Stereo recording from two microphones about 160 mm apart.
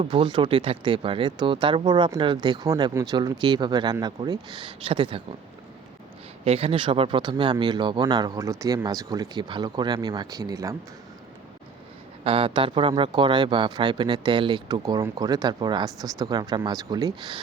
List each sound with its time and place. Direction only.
0.0 s speech: 30° right (ahead or behind)
6.4 s speech: 40° right (ahead or behind); by 10.8 s 20° right (ahead or behind)
12.2 s speech: 35° right (ahead or behind)